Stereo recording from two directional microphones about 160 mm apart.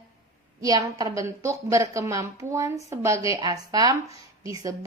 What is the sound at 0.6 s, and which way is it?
A woman's voice, 20° right (ahead or behind).